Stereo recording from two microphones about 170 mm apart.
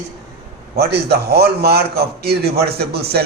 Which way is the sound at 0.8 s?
70° right (ahead or behind).